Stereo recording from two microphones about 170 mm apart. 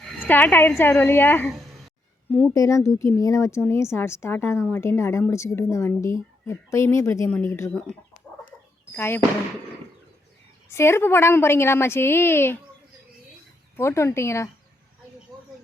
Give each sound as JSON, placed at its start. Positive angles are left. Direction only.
{"t": 0.0, "sound": "a sound", "side_deg": 5}
{"t": 0.8, "sound": "speech", "side_deg": 15}
{"t": 10.7, "sound": "speech", "side_deg": 15}
{"t": 13.7, "sound": "speech", "side_deg": 15}